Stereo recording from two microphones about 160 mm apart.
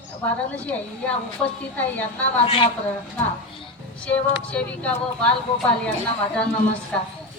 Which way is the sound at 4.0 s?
10° left (ahead or behind).